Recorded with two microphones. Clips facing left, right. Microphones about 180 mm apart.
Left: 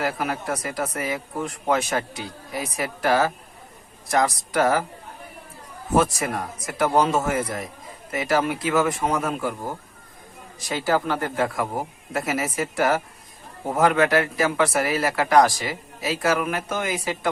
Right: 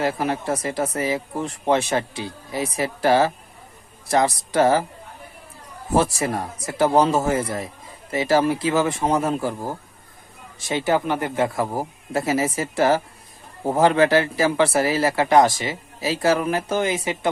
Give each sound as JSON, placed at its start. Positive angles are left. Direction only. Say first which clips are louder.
{"t": 0.0, "sound": "speech", "louder": "right 3 dB", "side_deg": -25}
{"t": 5.9, "sound": "speech", "louder": "right 1 dB", "side_deg": -30}
{"t": 10.6, "sound": "speech", "louder": "right 2 dB", "side_deg": -20}